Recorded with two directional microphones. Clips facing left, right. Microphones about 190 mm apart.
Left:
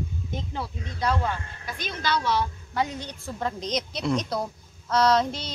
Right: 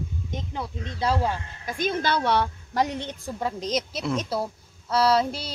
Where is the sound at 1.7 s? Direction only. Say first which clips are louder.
Right 4 dB; 50° right (ahead or behind).